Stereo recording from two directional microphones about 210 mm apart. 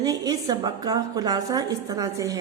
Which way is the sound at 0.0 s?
20° right (ahead or behind).